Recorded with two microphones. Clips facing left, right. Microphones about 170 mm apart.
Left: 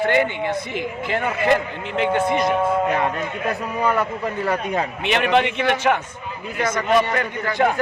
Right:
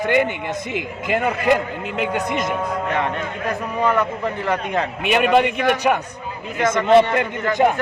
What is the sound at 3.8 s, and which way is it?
Speech, 10° left (ahead or behind).